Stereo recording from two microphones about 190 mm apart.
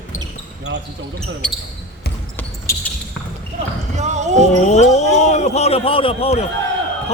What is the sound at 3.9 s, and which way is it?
Basketball bounce, 35° right (ahead or behind).